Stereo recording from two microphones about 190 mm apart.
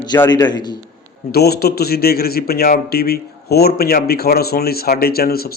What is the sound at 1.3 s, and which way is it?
Speech, 55° left (ahead or behind).